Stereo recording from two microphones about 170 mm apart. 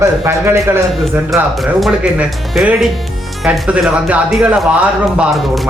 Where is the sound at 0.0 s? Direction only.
15° right (ahead or behind).